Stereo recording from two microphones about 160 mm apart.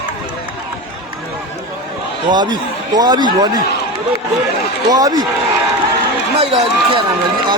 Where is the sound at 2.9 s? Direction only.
25° right (ahead or behind).